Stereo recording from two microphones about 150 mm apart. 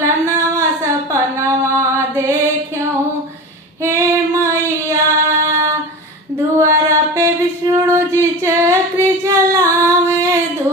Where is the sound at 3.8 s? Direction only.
20° right (ahead or behind).